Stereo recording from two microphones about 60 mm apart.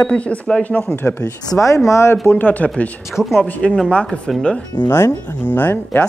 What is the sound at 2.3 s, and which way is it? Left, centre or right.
Speech, left.